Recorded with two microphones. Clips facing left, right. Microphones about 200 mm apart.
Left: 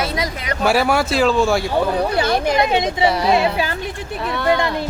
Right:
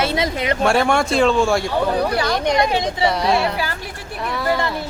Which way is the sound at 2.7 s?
20° left (ahead or behind).